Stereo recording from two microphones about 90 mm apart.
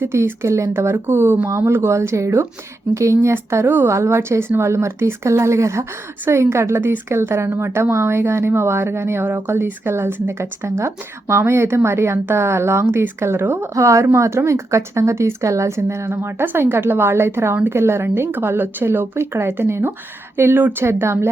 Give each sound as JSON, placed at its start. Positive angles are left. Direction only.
{"t": 0.0, "sound": "a woman's voice", "side_deg": -25}
{"t": 13.7, "sound": "a woman's voice", "side_deg": -35}